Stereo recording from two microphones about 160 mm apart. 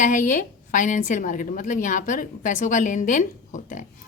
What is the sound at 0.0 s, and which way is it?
A woman's voice, 50° left (ahead or behind).